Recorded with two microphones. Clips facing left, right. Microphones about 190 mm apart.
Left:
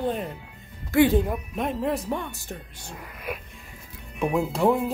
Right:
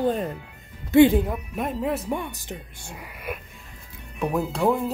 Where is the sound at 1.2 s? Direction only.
Centre (ahead or behind).